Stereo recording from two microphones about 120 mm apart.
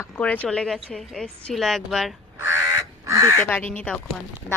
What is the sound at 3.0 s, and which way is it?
Speech, 25° right (ahead or behind).